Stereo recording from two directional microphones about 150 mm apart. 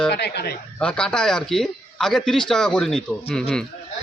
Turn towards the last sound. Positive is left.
turn(degrees=5)  # may be behind; listen again after turning